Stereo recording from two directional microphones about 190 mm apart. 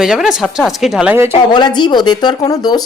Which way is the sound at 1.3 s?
20° left (ahead or behind).